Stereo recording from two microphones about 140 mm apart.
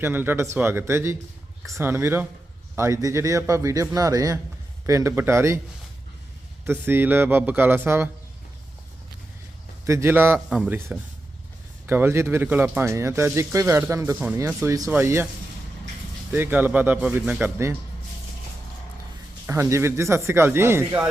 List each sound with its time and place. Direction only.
0.0 s a man's voice: 15° right (ahead or behind)
6.7 s speech: 15° right (ahead or behind)
9.8 s a man's voice: 20° right (ahead or behind)
16.3 s speech: 15° right (ahead or behind)
19.5 s a man's voice: 20° right (ahead or behind)